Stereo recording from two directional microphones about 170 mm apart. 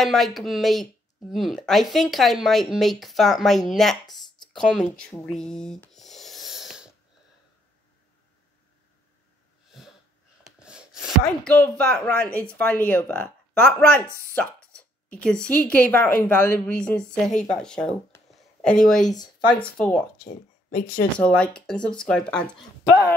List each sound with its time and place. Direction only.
0.0 s speech: centre (ahead or behind)
9.7 s a sound: centre (ahead or behind)
12.1 s a woman's voice: 5° left (ahead or behind)
18.1 s a sound: 5° left (ahead or behind)
18.9 s a woman's voice: 5° left (ahead or behind)
20.2 s speech: 60° left (ahead or behind)
21.2 s speech: 5° left (ahead or behind)